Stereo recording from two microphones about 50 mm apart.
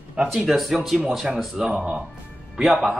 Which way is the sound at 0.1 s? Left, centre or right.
Centre.